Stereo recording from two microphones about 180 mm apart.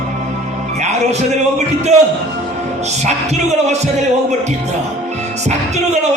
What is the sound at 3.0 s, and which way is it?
Speech, 40° right (ahead or behind).